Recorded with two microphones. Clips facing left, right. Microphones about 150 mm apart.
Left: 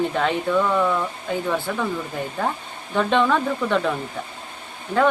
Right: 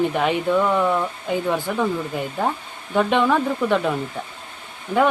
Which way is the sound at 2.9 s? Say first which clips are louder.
Right 1 dB; 10° right (ahead or behind).